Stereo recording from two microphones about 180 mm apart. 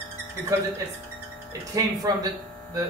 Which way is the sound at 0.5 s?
15° right (ahead or behind).